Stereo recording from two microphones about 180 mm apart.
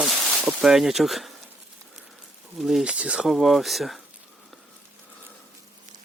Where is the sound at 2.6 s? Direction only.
Centre (ahead or behind).